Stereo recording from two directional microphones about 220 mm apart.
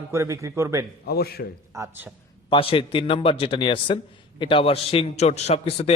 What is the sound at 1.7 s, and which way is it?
Speech, 15° right (ahead or behind).